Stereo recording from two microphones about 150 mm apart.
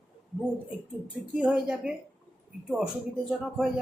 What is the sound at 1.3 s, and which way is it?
Speech, 5° right (ahead or behind).